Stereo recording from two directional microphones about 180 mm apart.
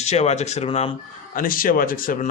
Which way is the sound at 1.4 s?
50° left (ahead or behind).